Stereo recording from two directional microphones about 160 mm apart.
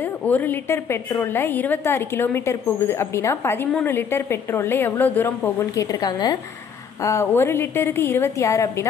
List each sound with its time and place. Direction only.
0.2 s a woman's voice: 10° left (ahead or behind)